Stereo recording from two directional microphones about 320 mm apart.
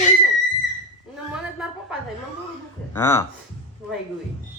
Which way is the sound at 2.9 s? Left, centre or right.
Centre.